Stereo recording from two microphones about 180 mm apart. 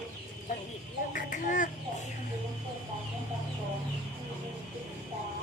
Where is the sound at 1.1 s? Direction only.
45° left (ahead or behind).